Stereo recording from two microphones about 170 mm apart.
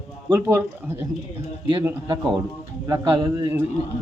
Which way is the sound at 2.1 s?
25° right (ahead or behind).